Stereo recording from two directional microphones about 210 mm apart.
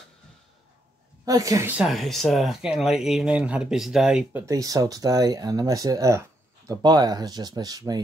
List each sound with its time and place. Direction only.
1.2 s speech: 15° right (ahead or behind)
4.5 s speech: 15° right (ahead or behind)